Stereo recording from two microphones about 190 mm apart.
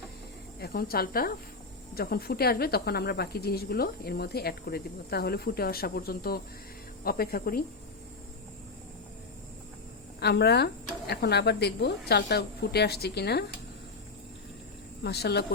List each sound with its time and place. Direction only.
0.6 s a woman's voice: 55° left (ahead or behind)
10.2 s speech: 60° left (ahead or behind)
15.0 s speech: 60° left (ahead or behind)